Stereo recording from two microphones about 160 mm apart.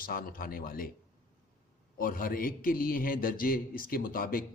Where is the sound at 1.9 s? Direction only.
60° left (ahead or behind).